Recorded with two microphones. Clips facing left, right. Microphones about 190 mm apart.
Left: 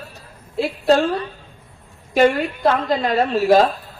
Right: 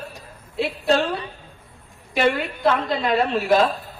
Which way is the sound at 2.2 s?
45° left (ahead or behind).